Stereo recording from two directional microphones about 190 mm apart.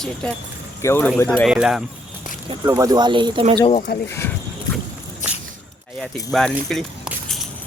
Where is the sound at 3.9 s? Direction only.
55° left (ahead or behind).